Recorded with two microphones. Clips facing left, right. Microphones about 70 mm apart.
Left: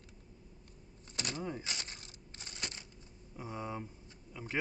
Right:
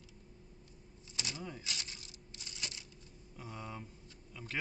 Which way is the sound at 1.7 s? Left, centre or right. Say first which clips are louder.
Left 1 dB; left.